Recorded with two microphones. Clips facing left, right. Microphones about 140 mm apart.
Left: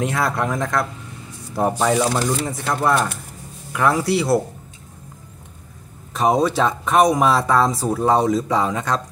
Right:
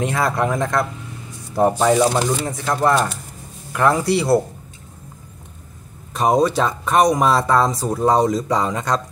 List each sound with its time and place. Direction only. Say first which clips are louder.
0.0 s speech: right 2 dB; centre (ahead or behind)
6.1 s speech: right 1 dB; centre (ahead or behind)